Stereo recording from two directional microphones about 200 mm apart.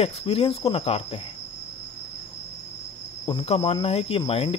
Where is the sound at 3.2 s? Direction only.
25° left (ahead or behind).